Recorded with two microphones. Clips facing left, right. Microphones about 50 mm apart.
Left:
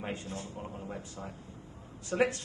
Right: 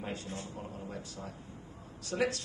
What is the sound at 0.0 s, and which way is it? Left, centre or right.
A man's voice, left.